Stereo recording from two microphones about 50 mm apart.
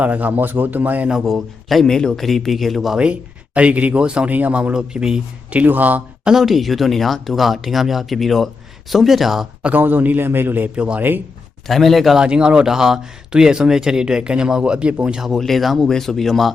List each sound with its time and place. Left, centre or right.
0.0 s speech: right
1.1 s speech: centre
3.0 s speech: right
4.3 s speech: right; by 5.2 s centre
5.6 s speech: right
6.2 s speech: centre
9.6 s a man's voice: right
10.8 s speech: right
11.7 s speech: centre
12.1 s speech: centre
15.4 s speech: centre